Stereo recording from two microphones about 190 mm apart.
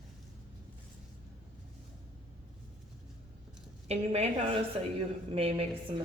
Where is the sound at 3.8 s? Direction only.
35° right (ahead or behind).